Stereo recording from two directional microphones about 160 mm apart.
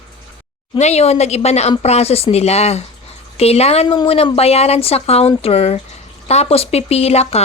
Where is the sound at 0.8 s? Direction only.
45° left (ahead or behind).